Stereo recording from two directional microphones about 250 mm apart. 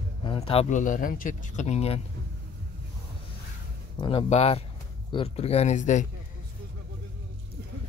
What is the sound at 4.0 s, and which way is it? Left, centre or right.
Speech, left.